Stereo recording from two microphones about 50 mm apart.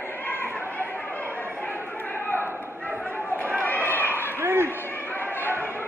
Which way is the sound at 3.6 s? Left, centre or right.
Left.